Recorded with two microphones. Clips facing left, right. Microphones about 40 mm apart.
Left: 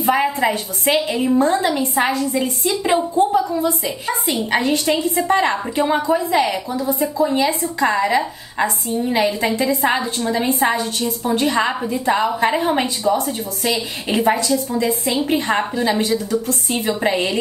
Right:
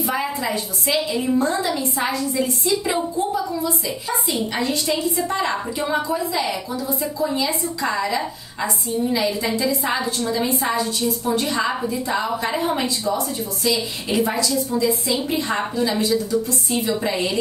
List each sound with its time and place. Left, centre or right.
0.0 s a woman's voice: left
6.9 s a woman's voice: left